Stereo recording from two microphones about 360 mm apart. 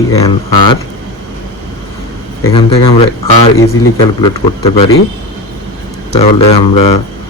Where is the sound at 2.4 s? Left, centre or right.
Centre.